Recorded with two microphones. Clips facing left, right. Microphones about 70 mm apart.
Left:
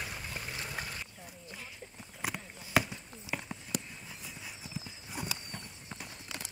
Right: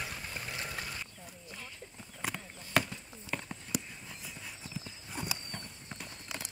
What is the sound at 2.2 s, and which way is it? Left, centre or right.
Clip-clop, centre.